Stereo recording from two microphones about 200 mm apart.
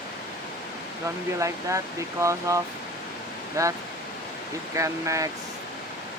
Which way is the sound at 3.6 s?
15° right (ahead or behind).